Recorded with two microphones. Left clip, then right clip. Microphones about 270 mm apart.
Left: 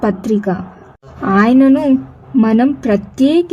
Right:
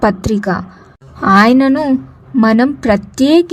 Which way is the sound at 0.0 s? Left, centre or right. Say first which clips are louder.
Right 2 dB; right.